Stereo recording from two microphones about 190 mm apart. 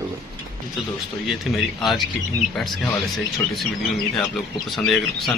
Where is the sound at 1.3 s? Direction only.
Centre (ahead or behind).